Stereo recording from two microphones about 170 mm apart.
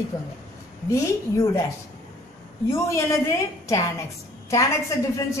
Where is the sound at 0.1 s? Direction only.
20° left (ahead or behind).